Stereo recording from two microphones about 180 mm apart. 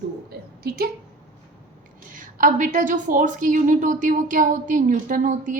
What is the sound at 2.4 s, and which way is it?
A woman's voice, 50° right (ahead or behind).